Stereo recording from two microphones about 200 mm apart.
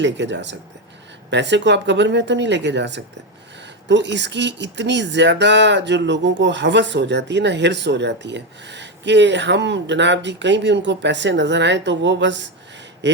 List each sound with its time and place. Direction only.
0.0 s speech: 60° right (ahead or behind)